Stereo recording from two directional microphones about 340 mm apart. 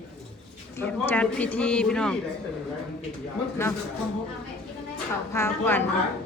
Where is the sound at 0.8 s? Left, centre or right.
Centre.